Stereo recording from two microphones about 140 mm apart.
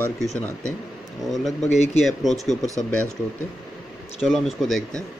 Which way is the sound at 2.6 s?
25° right (ahead or behind).